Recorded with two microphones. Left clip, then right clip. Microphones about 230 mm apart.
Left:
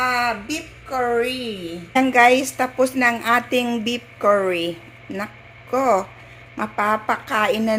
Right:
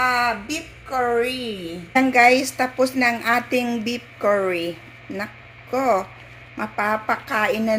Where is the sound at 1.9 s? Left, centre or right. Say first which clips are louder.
Left 1 dB; centre.